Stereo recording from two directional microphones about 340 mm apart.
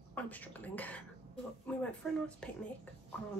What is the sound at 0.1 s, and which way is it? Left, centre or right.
A woman's voice, centre.